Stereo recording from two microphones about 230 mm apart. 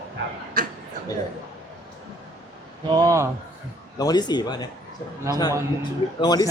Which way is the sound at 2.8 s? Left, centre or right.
Centre.